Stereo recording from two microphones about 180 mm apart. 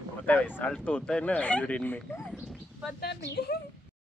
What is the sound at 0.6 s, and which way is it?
Speech, 10° left (ahead or behind).